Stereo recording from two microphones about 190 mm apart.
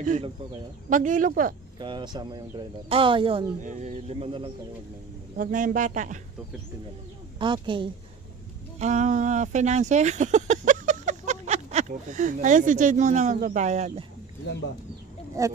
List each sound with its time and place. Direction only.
0.0 s speech: 40° right (ahead or behind)
1.8 s speech: 25° right (ahead or behind)
3.6 s speech: 40° right (ahead or behind)
5.4 s speech: 45° right (ahead or behind)
7.3 s speech: 25° right (ahead or behind)
8.7 s speech: 40° right (ahead or behind)
15.4 s speech: 15° right (ahead or behind)